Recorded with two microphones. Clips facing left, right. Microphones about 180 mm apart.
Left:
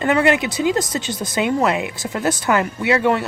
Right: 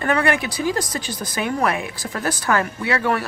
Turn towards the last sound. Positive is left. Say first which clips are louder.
# left 4 dB
turn(degrees=20)  # may be behind; listen again after turning